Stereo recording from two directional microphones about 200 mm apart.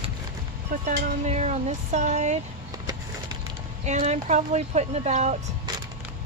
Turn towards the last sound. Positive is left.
turn(degrees=-35)  # may be behind; listen again after turning